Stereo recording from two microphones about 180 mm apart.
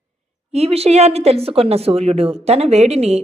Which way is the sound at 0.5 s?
35° right (ahead or behind).